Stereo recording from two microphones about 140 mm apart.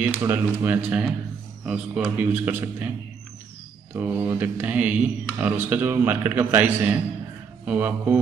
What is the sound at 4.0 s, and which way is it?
A man's voice, 15° right (ahead or behind).